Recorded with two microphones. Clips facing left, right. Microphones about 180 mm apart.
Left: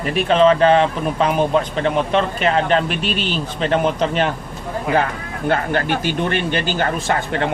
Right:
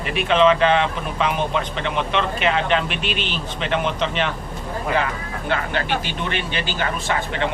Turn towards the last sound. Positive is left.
turn(degrees=50)  # may be behind; listen again after turning